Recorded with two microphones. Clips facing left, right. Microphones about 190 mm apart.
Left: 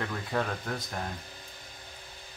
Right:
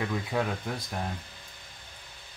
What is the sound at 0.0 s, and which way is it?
Speech, 5° right (ahead or behind).